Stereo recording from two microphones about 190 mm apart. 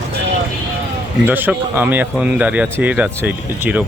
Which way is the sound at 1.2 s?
10° right (ahead or behind).